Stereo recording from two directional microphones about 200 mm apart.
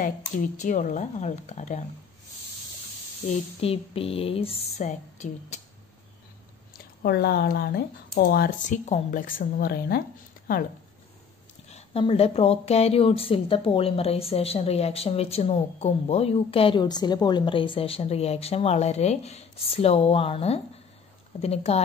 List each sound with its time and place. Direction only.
0.0 s speech: 40° left (ahead or behind)
3.3 s speech: 30° left (ahead or behind)
7.0 s speech: 55° left (ahead or behind)
11.7 s speech: 30° left (ahead or behind)